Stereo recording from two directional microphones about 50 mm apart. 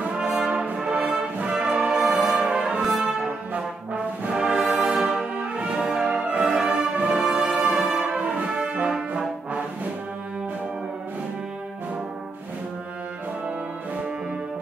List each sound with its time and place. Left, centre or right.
0.1 s brass instrument: centre
0.9 s music: right
2.9 s brass instrument: centre
3.3 s brass instrument: right
4.5 s music: centre
4.9 s brass instrument: centre
5.2 s brass instrument: right
6.4 s music: centre
6.8 s music: right
7.2 s music: centre
7.7 s brass instrument: centre
8.1 s brass instrument: right